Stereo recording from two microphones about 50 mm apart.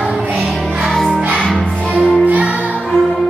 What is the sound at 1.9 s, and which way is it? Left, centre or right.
Music, right.